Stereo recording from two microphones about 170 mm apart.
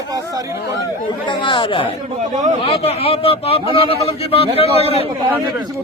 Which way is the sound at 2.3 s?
45° right (ahead or behind).